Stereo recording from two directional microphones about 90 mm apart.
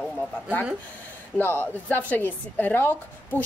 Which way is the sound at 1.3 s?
25° left (ahead or behind).